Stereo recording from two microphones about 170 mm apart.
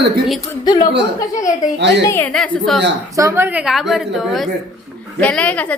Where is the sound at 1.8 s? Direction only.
90° right.